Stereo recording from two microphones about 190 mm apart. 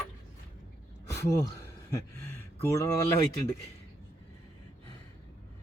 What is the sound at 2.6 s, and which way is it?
Speech, 15° left (ahead or behind).